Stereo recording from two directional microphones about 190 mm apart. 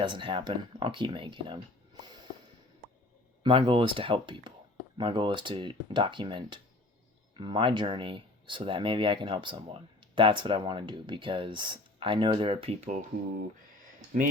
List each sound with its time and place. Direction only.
0.0 s speech: 25° right (ahead or behind)
3.4 s speech: 30° right (ahead or behind)